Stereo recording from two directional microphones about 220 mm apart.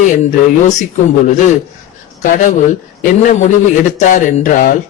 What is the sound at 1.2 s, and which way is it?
Speech, 35° left (ahead or behind).